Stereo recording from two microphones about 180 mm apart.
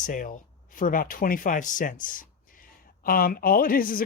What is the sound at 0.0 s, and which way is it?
Speech, 45° left (ahead or behind).